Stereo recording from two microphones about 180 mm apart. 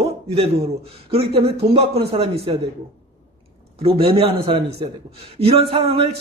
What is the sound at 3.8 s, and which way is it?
Speech, 30° right (ahead or behind).